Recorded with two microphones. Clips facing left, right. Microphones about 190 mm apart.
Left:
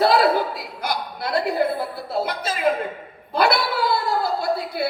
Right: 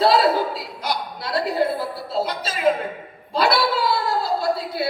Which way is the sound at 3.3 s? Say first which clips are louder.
Even; 55° left (ahead or behind).